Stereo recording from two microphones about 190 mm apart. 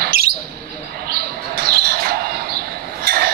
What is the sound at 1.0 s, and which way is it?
Bird, 55° right (ahead or behind).